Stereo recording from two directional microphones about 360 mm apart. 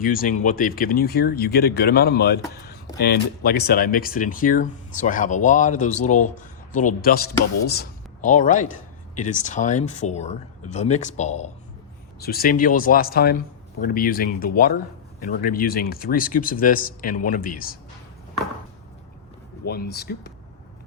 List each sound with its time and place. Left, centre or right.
0.0 s speech: left
19.6 s speech: left